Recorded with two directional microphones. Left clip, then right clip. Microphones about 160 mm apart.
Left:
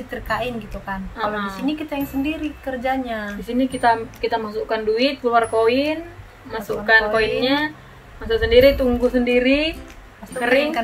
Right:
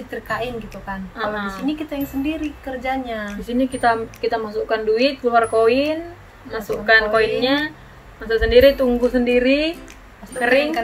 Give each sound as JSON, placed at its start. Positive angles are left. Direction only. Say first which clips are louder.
{"t": 0.1, "sound": "a woman's voice", "louder": "left 1 dB", "side_deg": 25}
{"t": 1.1, "sound": "speech", "louder": "even", "side_deg": 0}
{"t": 1.7, "sound": "a woman's voice", "louder": "even", "side_deg": 25}
{"t": 3.3, "sound": "speech", "louder": "right 1 dB", "side_deg": 0}